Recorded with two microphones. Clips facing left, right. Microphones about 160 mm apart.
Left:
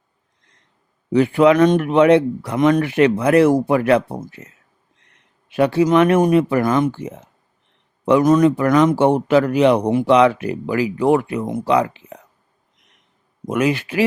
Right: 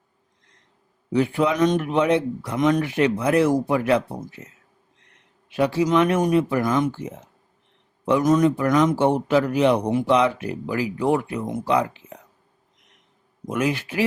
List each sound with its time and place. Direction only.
1.1 s speech: 70° left (ahead or behind)
5.5 s speech: 60° left (ahead or behind); by 12.1 s 80° left
13.5 s speech: 75° left (ahead or behind)